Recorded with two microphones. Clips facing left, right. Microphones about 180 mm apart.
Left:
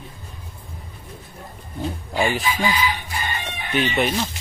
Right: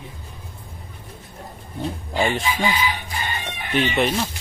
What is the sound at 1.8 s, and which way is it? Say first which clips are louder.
Speech: even; centre (ahead or behind).